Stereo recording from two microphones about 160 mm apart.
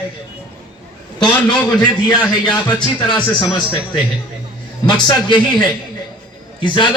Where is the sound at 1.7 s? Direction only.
30° left (ahead or behind).